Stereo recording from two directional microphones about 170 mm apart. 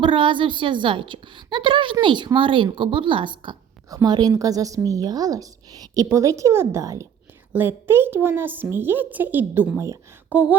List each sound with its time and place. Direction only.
0.0 s a woman's voice: 30° right (ahead or behind); by 10.5 s 10° right (ahead or behind)